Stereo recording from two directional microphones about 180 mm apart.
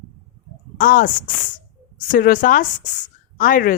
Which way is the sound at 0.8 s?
50° left (ahead or behind).